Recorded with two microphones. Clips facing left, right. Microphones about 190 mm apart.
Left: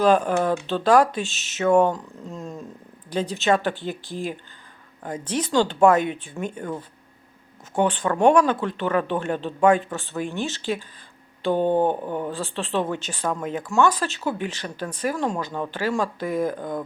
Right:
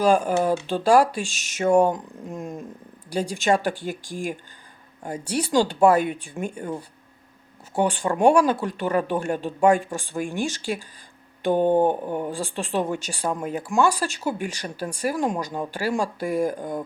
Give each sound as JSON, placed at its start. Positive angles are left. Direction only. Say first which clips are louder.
{"t": 0.0, "sound": "speech", "louder": "left 1 dB", "side_deg": -10}
{"t": 2.2, "sound": "a sound", "louder": "right 2 dB", "side_deg": -15}
{"t": 3.1, "sound": "speech", "louder": "even", "side_deg": -10}
{"t": 7.8, "sound": "speech", "louder": "left 1 dB", "side_deg": -10}